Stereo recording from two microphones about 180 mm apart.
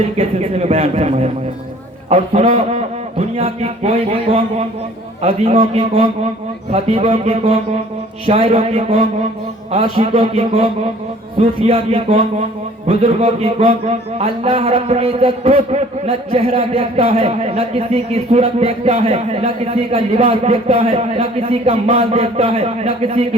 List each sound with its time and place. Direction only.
0.2 s a man's voice: 35° right (ahead or behind)